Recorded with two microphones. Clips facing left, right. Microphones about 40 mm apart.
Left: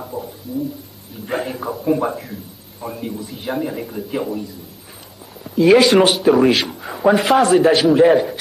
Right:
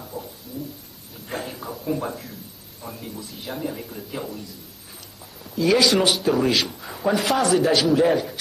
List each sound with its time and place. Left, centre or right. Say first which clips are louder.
0.2 s a sound: left 6 dB; left
1.2 s a man's voice: left 8 dB; left
5.6 s a man's voice: left 7 dB; left